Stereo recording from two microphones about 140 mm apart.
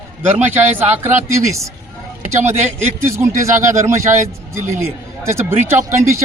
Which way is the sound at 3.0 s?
20° right (ahead or behind).